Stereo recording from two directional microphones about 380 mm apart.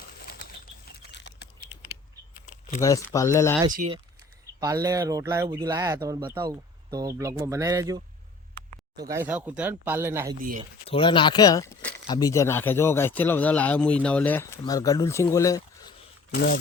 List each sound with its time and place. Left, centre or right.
0.3 s bird flight: left
1.1 s chewing: left
2.8 s speech: centre
4.6 s speech: centre
10.4 s speech: centre
10.8 s speech: centre
16.3 s speech: left